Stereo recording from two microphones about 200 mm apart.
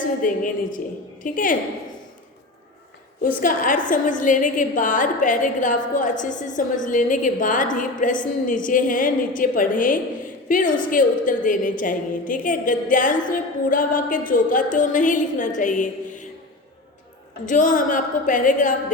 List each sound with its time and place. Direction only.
0.2 s a woman's voice: 40° left (ahead or behind)
3.2 s a woman's voice: 40° left (ahead or behind)
17.4 s a woman's voice: 40° left (ahead or behind)